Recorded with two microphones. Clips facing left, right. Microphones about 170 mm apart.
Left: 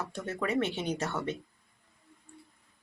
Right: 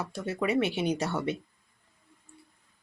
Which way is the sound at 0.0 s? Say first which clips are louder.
Right 3 dB; 10° right (ahead or behind).